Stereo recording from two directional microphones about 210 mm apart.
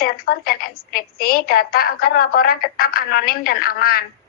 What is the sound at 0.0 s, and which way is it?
A woman's voice, 45° left (ahead or behind).